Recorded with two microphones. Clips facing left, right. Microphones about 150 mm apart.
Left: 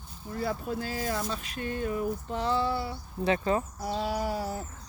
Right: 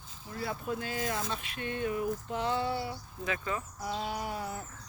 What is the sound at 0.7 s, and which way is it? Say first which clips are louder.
Speech: left 3 dB; 35° left (ahead or behind).